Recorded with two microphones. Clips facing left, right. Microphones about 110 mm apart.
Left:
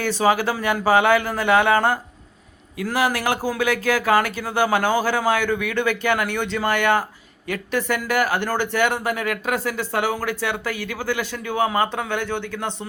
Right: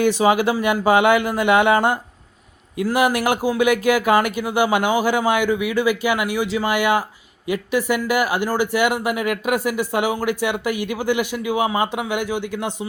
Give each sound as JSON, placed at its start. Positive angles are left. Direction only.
{"t": 0.0, "sound": "speech", "side_deg": -15}